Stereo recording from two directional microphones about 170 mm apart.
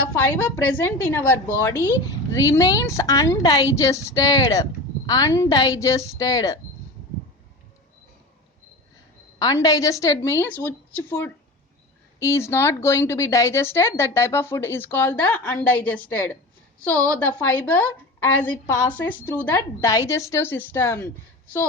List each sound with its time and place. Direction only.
0.2 s speech: 15° left (ahead or behind)
9.4 s speech: 20° left (ahead or behind)